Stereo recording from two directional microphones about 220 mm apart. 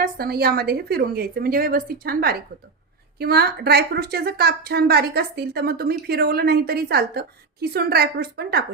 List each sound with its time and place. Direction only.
0.0 s a woman's voice: 45° right (ahead or behind)